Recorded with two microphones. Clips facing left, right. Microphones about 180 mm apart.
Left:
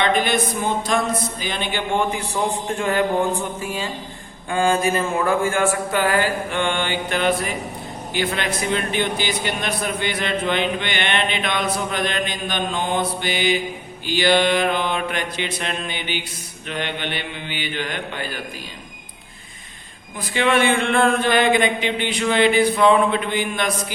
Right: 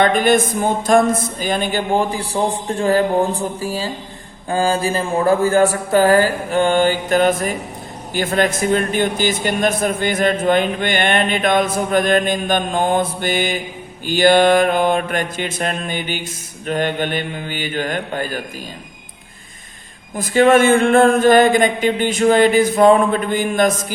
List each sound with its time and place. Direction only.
0.0 s a man's voice: 45° right (ahead or behind)
20.1 s speech: 45° right (ahead or behind)